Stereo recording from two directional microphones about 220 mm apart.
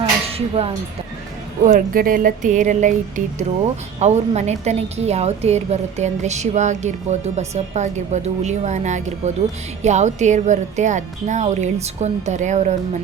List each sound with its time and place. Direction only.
0.3 s speech: 25° right (ahead or behind)
1.6 s a woman's voice: 40° right (ahead or behind)